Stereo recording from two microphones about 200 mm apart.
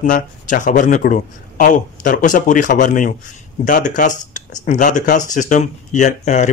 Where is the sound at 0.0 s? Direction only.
40° left (ahead or behind).